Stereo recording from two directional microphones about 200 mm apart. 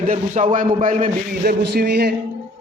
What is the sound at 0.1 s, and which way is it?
A man's voice, 40° right (ahead or behind).